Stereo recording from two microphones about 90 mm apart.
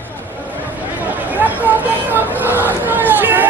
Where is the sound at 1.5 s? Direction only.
20° right (ahead or behind).